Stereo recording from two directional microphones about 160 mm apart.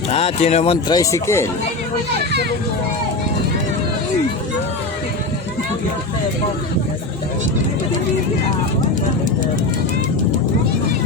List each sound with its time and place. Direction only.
0.1 s speech: 40° left (ahead or behind)
0.9 s speech: 15° left (ahead or behind)